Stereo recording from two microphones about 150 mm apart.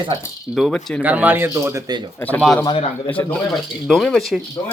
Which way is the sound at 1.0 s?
10° right (ahead or behind).